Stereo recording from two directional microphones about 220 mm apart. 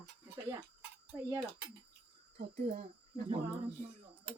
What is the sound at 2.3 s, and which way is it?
Speech, 40° right (ahead or behind).